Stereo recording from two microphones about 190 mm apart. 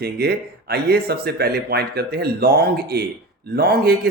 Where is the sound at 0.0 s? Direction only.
60° right (ahead or behind).